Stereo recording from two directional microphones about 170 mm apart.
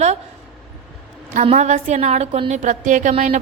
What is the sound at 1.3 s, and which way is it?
A woman's voice, 40° right (ahead or behind).